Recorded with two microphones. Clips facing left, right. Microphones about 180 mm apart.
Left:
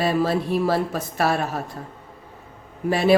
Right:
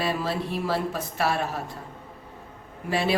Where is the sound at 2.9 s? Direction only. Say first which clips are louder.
Left 6 dB; 45° left (ahead or behind).